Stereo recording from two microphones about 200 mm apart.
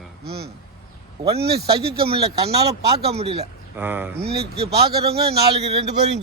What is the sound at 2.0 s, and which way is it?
A man's voice, 30° right (ahead or behind).